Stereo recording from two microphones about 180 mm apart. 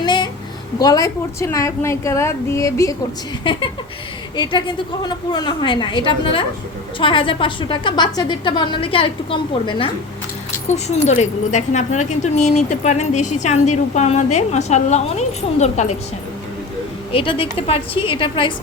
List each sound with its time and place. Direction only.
0.0 s a sound: 25° left (ahead or behind)
0.8 s a woman's voice: 20° left (ahead or behind)
5.0 s a woman's voice: 25° left (ahead or behind); by 16.0 s 40° left (ahead or behind)
17.1 s a woman's voice: 30° left (ahead or behind)